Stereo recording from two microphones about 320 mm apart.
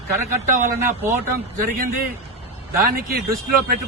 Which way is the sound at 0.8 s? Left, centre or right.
Centre.